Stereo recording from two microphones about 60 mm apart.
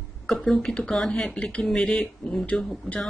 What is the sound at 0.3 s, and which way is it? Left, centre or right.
Speech, centre.